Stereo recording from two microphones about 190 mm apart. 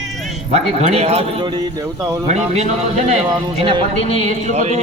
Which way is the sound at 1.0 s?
35° right (ahead or behind).